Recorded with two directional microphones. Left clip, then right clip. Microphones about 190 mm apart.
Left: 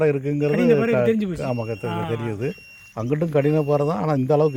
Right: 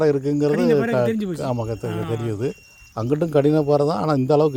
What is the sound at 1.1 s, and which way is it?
Speech, 75° right (ahead or behind).